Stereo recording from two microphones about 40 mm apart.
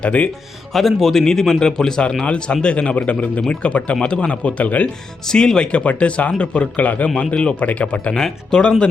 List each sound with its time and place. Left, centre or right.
0.0 s speech: left
0.7 s a man's voice: centre
2.2 s speech: left
5.3 s speech: centre
5.8 s speech: left
8.2 s speech: centre